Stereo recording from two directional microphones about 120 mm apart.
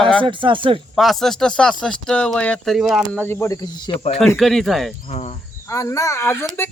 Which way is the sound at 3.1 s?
20° left (ahead or behind).